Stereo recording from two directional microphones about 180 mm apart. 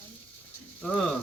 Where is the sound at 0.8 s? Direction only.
5° left (ahead or behind).